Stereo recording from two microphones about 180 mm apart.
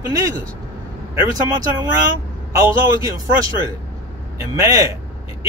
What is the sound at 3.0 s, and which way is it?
Speech, 20° right (ahead or behind).